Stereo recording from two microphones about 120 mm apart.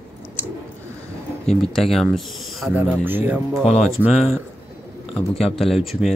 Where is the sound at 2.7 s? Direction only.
15° right (ahead or behind).